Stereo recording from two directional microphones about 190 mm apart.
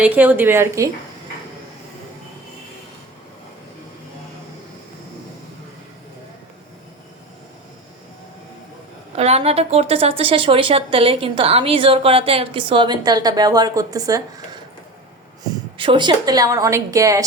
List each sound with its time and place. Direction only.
0.0 s a woman's voice: 10° right (ahead or behind)
9.1 s a woman's voice: 35° right (ahead or behind)
15.8 s a woman's voice: 25° right (ahead or behind)